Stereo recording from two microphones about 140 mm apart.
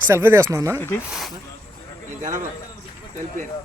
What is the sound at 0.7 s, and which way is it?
Speech, 15° left (ahead or behind).